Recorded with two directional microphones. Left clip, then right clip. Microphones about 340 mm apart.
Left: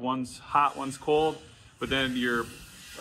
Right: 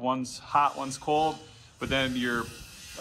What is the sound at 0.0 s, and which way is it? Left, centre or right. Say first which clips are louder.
Speech: right 2 dB; centre.